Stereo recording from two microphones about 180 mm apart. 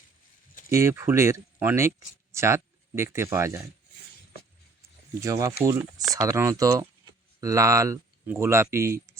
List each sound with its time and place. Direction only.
0.7 s speech: 15° right (ahead or behind)
5.2 s speech: 20° right (ahead or behind)